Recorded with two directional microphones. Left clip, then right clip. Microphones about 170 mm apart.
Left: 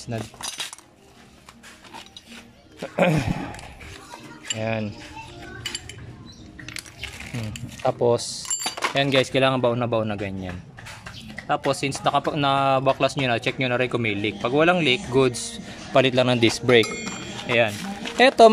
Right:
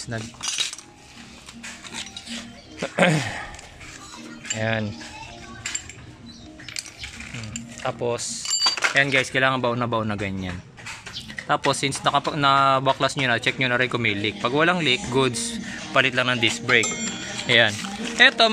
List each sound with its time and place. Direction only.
0.1 s speech: 10° left (ahead or behind)
2.8 s speech: 10° left (ahead or behind)
4.6 s speech: 10° left (ahead or behind)
7.5 s speech: 30° left (ahead or behind)
17.5 s speech: 10° left (ahead or behind)
18.1 s speech: 25° left (ahead or behind)